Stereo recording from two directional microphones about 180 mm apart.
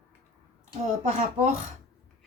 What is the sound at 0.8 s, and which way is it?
Speech, 45° right (ahead or behind).